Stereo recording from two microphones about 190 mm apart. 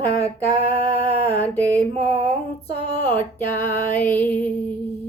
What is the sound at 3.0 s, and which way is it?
Music, 10° left (ahead or behind).